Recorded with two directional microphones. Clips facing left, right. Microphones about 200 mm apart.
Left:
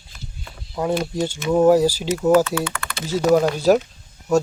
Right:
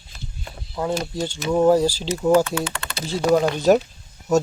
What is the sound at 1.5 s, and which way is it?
Speech, 10° left (ahead or behind).